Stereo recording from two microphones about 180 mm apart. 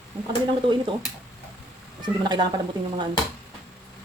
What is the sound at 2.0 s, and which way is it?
Speech, 25° right (ahead or behind).